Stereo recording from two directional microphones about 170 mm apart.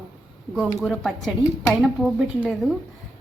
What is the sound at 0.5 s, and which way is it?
Speech, centre (ahead or behind).